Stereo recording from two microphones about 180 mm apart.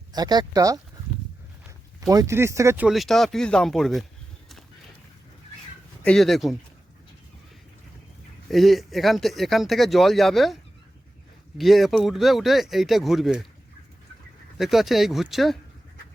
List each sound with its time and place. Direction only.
0.1 s speech: 20° right (ahead or behind)
2.0 s speech: 20° right (ahead or behind)
2.8 s speech: centre (ahead or behind)
6.1 s speech: centre (ahead or behind)
8.4 s speech: centre (ahead or behind)
14.6 s speech: centre (ahead or behind)